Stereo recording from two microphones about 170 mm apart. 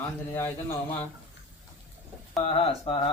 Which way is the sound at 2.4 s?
30° left (ahead or behind).